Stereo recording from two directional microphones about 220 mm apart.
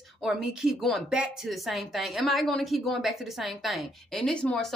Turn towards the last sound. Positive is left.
turn(degrees=5)  # may be behind; listen again after turning